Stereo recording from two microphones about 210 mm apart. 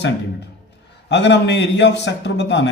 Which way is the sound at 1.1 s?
55° left (ahead or behind).